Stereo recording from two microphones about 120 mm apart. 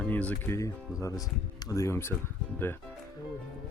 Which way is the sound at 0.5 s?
25° left (ahead or behind).